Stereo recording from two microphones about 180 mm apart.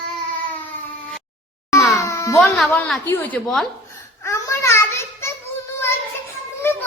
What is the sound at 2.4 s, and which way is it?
A woman's voice, 5° left (ahead or behind).